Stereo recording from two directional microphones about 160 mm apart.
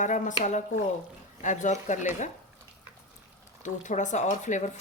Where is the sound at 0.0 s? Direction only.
50° left (ahead or behind).